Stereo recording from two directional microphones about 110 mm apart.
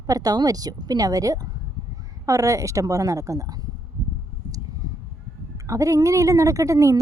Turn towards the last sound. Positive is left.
turn(degrees=-30)  # may be behind; listen again after turning